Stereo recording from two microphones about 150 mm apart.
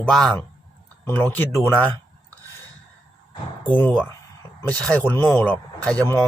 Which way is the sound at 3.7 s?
10° left (ahead or behind).